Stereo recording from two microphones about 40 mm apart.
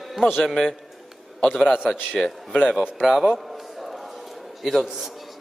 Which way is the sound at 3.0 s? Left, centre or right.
Centre.